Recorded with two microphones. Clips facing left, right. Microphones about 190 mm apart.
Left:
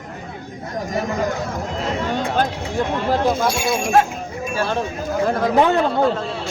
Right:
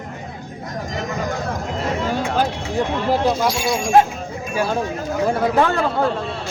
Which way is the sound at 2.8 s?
10° right (ahead or behind).